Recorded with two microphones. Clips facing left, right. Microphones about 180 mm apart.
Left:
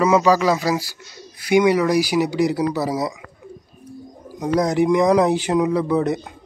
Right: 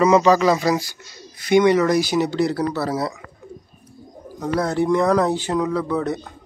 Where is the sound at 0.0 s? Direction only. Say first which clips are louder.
Right 1 dB; 5° left (ahead or behind).